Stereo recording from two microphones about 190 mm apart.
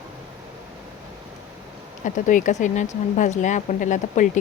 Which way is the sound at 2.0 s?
45° left (ahead or behind).